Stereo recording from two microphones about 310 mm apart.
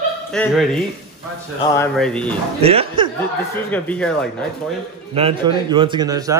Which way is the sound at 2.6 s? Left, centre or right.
Centre.